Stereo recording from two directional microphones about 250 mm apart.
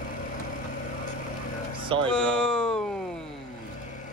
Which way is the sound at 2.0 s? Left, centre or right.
Centre.